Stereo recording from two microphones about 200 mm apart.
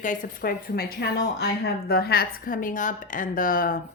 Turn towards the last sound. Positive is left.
turn(degrees=45)  # may be behind; listen again after turning